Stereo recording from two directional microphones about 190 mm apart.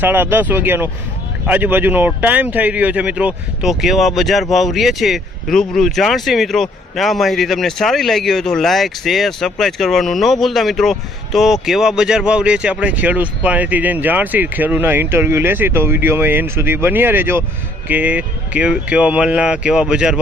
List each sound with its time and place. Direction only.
0.0 s speech: 10° right (ahead or behind)